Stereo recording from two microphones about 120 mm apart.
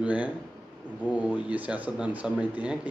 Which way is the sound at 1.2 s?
10° right (ahead or behind).